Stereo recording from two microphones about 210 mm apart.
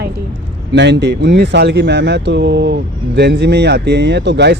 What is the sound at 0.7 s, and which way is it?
Speech, 55° right (ahead or behind).